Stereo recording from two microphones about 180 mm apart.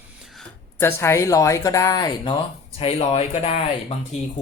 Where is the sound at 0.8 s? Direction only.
15° left (ahead or behind).